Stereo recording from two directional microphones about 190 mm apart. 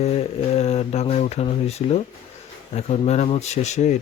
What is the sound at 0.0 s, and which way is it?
Speech, 35° left (ahead or behind).